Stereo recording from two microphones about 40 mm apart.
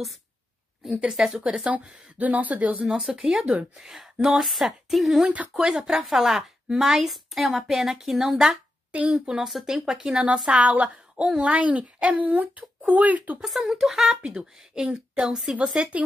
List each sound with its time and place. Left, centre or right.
1.0 s a woman's voice: centre
2.1 s speech: right
3.0 s speech: centre
3.3 s speech: right
3.7 s a woman's voice: centre
8.9 s speech: right
9.5 s speech: centre
9.8 s speech: centre
10.5 s speech: right
13.4 s speech: centre
14.0 s speech: right
15.1 s a woman's voice: centre
15.5 s speech: right